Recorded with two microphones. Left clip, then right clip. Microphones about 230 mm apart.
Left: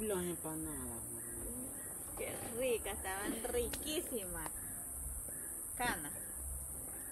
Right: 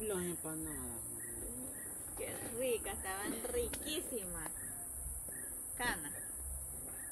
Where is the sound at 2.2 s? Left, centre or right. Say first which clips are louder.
Left 1 dB; centre.